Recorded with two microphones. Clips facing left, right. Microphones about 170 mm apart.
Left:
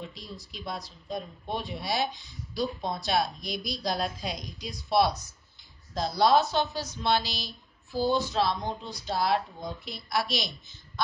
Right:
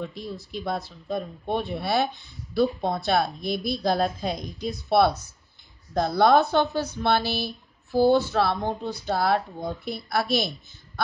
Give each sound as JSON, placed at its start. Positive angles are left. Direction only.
{"t": 0.0, "sound": "speech", "side_deg": -55}